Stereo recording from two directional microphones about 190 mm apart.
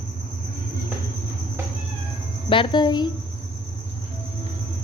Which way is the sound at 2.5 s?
25° left (ahead or behind).